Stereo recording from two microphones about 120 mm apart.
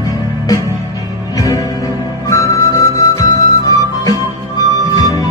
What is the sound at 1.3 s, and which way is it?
Music, 30° left (ahead or behind).